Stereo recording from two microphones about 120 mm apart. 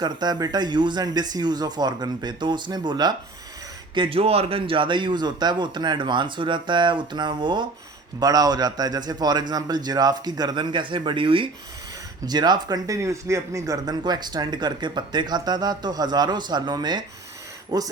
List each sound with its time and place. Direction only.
0.0 s speech: 35° right (ahead or behind)
3.9 s speech: 50° right (ahead or behind)
12.2 s speech: 35° right (ahead or behind)